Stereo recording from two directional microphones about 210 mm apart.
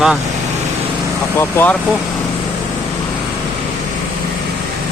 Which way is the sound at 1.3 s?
10° left (ahead or behind).